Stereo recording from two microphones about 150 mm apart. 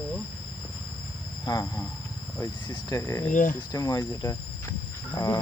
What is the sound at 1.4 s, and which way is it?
Speech, 25° left (ahead or behind).